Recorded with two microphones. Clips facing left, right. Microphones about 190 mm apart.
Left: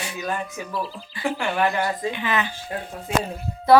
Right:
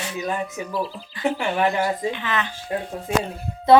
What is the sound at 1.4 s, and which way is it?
Speech, 20° right (ahead or behind).